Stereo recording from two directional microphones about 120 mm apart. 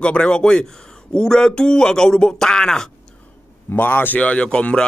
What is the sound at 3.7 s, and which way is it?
A man's voice, 15° left (ahead or behind).